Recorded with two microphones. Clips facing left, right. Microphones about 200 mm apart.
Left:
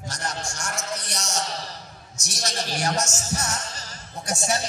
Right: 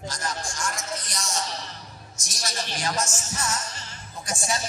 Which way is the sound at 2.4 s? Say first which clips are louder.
Left 3 dB; 40° left (ahead or behind).